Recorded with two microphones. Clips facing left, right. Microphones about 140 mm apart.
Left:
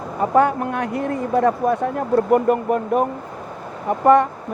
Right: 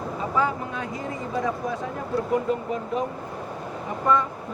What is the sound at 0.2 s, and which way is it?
Speech, 60° left (ahead or behind).